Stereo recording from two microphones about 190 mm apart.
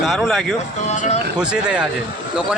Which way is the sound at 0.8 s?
35° left (ahead or behind).